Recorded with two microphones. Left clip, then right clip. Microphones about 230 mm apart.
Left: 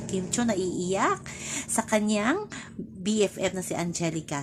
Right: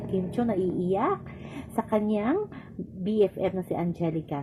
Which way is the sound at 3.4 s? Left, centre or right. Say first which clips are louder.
Right 1 dB; left.